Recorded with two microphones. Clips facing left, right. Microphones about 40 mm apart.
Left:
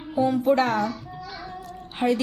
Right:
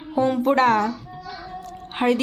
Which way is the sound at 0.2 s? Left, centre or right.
Right.